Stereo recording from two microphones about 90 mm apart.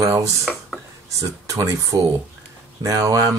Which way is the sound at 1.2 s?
35° right (ahead or behind).